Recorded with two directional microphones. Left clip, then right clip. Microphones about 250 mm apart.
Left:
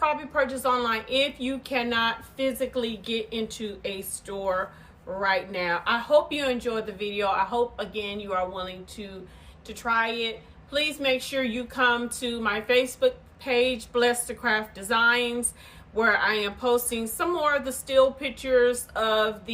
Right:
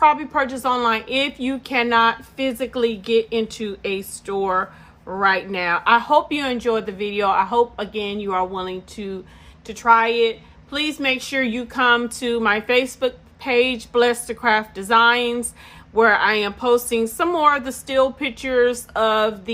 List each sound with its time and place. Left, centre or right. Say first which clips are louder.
0.0 s a woman's voice: right 8 dB; right